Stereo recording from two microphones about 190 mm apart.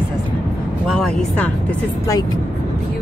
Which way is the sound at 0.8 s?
Centre (ahead or behind).